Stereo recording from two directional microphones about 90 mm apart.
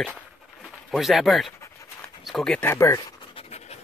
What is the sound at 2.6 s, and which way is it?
Speech, 30° left (ahead or behind).